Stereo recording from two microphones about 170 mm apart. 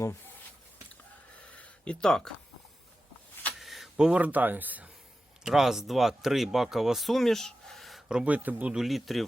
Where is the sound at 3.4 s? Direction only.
Centre (ahead or behind).